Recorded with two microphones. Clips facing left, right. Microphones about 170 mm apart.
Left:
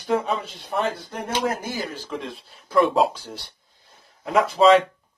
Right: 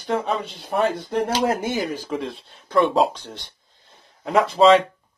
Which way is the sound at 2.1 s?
Centre (ahead or behind).